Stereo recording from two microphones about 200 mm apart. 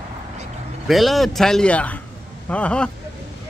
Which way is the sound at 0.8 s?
Centre (ahead or behind).